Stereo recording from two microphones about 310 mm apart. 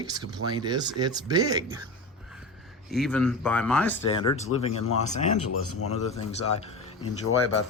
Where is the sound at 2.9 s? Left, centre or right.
Centre.